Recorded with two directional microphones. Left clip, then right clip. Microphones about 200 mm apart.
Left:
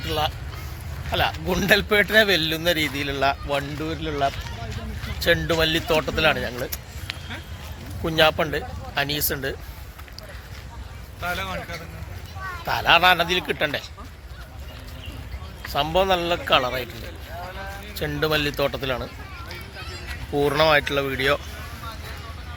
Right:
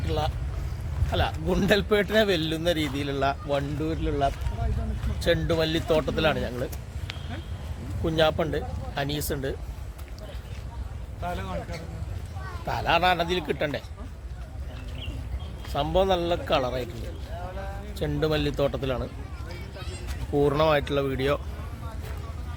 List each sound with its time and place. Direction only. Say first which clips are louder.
1.1 s speech: left 4 dB; centre (ahead or behind)
8.0 s speech: left 4 dB; 10° left (ahead or behind)
11.2 s speech: left 5 dB; 15° right (ahead or behind)
12.6 s speech: left 6 dB; 5° left (ahead or behind)
15.7 s speech: left 3 dB; 5° left (ahead or behind)
17.9 s speech: left 3 dB; centre (ahead or behind)
19.7 s a sound: left 4 dB; 65° right (ahead or behind)
20.4 s speech: left 4 dB; 5° right (ahead or behind)